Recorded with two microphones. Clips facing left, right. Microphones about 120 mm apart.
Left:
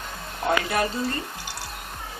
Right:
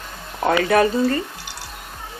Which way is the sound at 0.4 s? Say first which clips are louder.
Right 7 dB; 90° right.